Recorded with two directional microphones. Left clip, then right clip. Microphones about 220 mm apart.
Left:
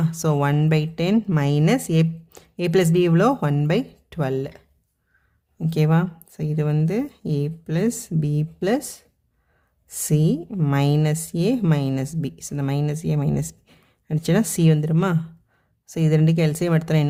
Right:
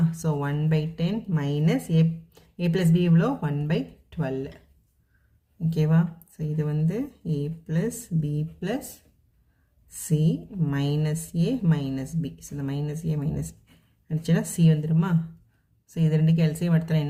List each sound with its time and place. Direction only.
0.1 s speech: 45° left (ahead or behind)
5.7 s speech: 40° left (ahead or behind)
10.1 s speech: 45° left (ahead or behind)